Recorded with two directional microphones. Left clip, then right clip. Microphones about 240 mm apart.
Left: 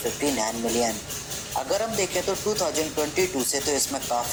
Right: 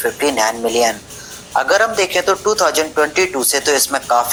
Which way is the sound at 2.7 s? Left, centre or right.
Right.